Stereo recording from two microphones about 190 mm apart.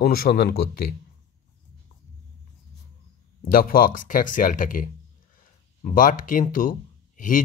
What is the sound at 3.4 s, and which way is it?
Speech, 50° left (ahead or behind).